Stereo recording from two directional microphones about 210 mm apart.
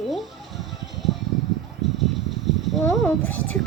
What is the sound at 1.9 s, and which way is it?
Vehicle, centre (ahead or behind).